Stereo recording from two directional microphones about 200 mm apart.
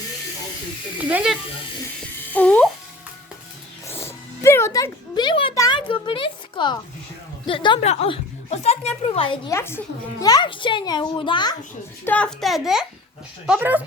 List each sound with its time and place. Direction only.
0.9 s a child's voice: 5° right (ahead or behind)
2.3 s music: 5° left (ahead or behind)
3.8 s music: 10° left (ahead or behind)
7.4 s a woman's voice: 25° left (ahead or behind)
9.6 s a woman's voice: 10° left (ahead or behind)
12.0 s a child's voice: 5° left (ahead or behind)